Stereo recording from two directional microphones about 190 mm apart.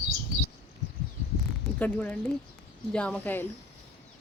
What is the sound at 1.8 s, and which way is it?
A woman's voice, 10° left (ahead or behind).